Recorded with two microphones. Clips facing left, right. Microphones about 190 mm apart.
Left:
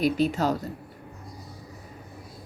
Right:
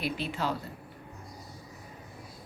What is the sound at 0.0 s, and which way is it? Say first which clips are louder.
Speech: left 9 dB; 40° left (ahead or behind).